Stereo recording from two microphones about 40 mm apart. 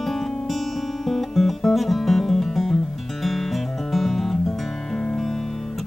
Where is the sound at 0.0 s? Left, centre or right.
Centre.